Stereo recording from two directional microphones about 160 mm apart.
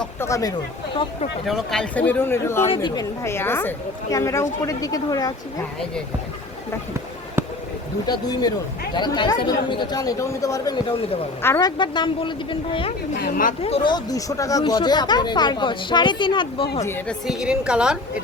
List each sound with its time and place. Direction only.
0.0 s a woman's voice: 15° left (ahead or behind)
1.5 s speech: centre (ahead or behind)
2.6 s a woman's voice: 30° left (ahead or behind)
8.0 s a woman's voice: 25° left (ahead or behind)
11.8 s speech: 30° left (ahead or behind)
13.1 s a woman's voice: 65° left (ahead or behind)
13.6 s speech: 40° left (ahead or behind)
13.9 s a woman's voice: 20° left (ahead or behind)
16.8 s speech: 15° left (ahead or behind)
17.2 s a woman's voice: 5° right (ahead or behind)